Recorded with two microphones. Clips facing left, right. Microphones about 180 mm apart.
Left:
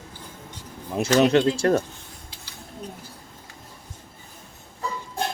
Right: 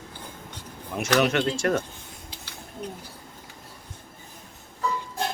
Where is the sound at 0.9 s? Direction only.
30° left (ahead or behind).